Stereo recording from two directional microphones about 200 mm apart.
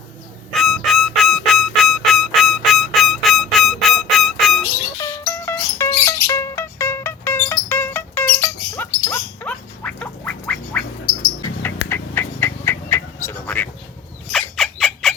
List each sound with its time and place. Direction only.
0.5 s music: centre (ahead or behind)
4.9 s music: 15° left (ahead or behind)
9.0 s gargling: 10° left (ahead or behind)
11.9 s a sound: 10° left (ahead or behind)
14.3 s bird: 5° left (ahead or behind)